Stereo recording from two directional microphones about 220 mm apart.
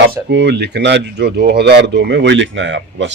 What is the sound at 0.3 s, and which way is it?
Speech, 55° right (ahead or behind).